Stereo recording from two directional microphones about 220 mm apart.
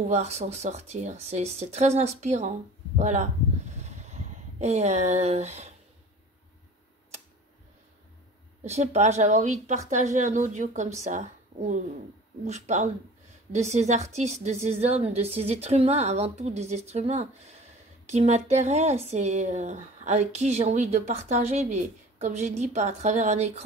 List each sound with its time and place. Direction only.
0.1 s speech: 30° right (ahead or behind)
3.0 s a sound: 30° right (ahead or behind)
8.6 s a woman's voice: 30° right (ahead or behind)